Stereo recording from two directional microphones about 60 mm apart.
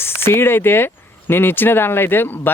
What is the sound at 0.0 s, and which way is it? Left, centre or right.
Speech, left.